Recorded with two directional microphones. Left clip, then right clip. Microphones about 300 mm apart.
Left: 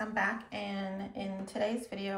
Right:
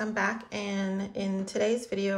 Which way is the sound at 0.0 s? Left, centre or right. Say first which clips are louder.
Right 3 dB; centre.